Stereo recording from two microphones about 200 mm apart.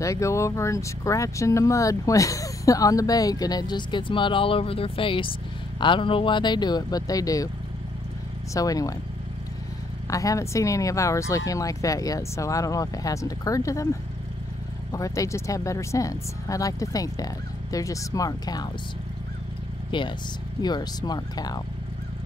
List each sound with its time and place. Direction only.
0.0 s speech: 15° left (ahead or behind)
8.5 s speech: 15° left (ahead or behind)
10.0 s speech: 15° left (ahead or behind)
14.9 s speech: 15° left (ahead or behind)
19.9 s speech: 25° left (ahead or behind)